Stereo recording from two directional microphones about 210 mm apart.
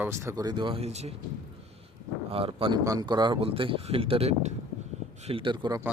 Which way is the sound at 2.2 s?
25° right (ahead or behind).